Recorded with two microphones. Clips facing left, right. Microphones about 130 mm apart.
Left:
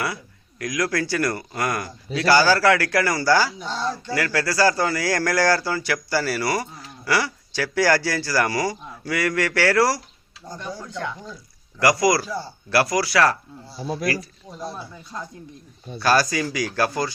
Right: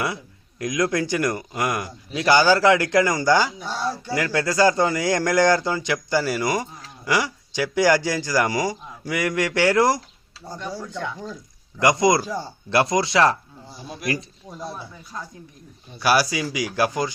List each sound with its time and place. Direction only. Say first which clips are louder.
0.6 s speech: right 2 dB; 20° right (ahead or behind)
16.0 s speech: even; 10° right (ahead or behind)